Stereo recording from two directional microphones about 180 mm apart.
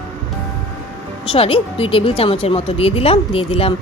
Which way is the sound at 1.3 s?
30° left (ahead or behind).